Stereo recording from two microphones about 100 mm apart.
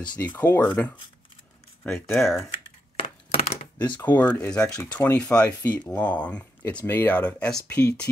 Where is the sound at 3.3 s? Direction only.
90° left.